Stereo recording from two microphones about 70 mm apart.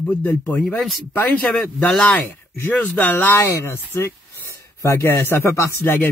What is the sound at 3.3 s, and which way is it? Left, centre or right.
Speech, left.